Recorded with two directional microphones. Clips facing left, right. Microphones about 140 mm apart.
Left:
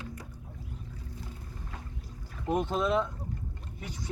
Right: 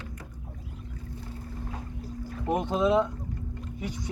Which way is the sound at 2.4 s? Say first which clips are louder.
Right 3 dB; 15° right (ahead or behind).